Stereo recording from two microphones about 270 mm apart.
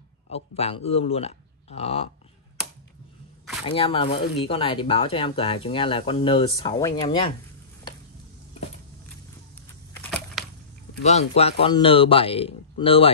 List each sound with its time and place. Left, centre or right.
0.3 s speech: left
3.6 s speech: centre
10.4 s a sound: centre
11.1 s speech: left